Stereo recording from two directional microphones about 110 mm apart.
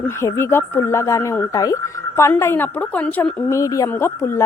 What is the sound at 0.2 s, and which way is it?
A woman's voice, 25° left (ahead or behind).